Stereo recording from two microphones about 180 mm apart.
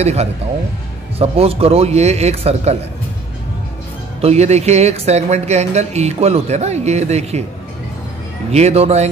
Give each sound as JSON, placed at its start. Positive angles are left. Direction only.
{"t": 0.0, "sound": "speech", "side_deg": -35}
{"t": 4.2, "sound": "speech", "side_deg": -35}
{"t": 8.5, "sound": "speech", "side_deg": -35}